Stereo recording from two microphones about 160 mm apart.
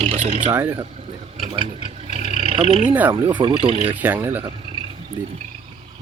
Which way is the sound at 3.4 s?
30° right (ahead or behind).